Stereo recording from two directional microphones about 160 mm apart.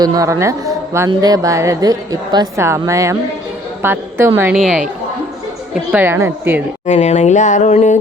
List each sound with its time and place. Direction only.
0.0 s a woman's voice: 25° right (ahead or behind)
4.5 s a woman's voice: centre (ahead or behind)
6.8 s speech: 45° left (ahead or behind)